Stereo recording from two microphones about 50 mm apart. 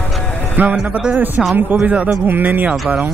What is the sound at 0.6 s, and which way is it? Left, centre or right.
Speech, right.